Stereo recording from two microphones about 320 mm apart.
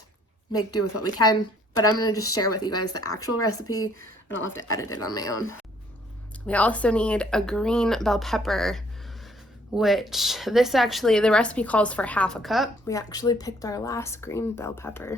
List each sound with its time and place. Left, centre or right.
0.5 s speech: left
6.5 s speech: centre
12.9 s speech: centre